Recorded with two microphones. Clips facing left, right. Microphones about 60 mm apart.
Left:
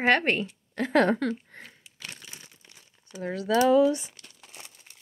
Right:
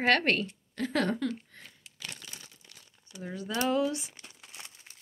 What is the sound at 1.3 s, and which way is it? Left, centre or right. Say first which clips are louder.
Crumpling: left 5 dB; left.